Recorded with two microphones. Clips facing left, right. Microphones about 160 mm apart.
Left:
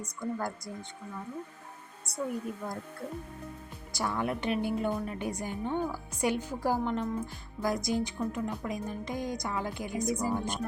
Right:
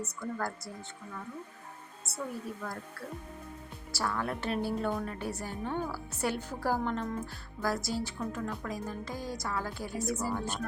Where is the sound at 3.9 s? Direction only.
20° left (ahead or behind).